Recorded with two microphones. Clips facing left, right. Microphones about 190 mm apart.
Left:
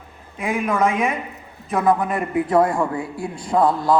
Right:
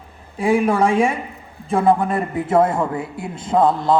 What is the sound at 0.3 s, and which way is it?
A man's voice, 30° right (ahead or behind).